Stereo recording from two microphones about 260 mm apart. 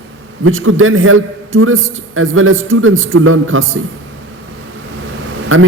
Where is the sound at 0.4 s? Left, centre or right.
Right.